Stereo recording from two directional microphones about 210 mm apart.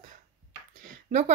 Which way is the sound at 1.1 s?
35° right (ahead or behind).